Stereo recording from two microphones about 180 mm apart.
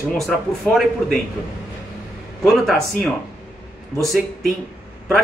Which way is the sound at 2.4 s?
Centre (ahead or behind).